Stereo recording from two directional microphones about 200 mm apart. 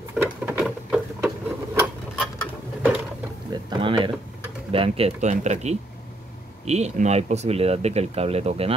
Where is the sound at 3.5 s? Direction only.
25° right (ahead or behind).